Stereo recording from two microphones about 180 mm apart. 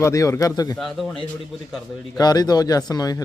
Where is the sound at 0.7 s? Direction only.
Centre (ahead or behind).